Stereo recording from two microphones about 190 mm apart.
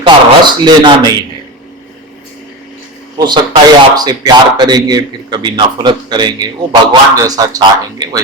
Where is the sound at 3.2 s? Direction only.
25° right (ahead or behind).